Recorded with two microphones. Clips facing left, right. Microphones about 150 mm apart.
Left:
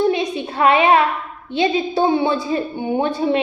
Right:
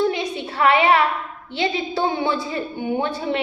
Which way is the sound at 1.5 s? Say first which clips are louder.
Left 5 dB; 25° left (ahead or behind).